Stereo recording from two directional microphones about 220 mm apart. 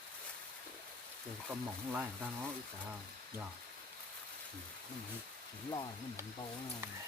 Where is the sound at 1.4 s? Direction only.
10° right (ahead or behind).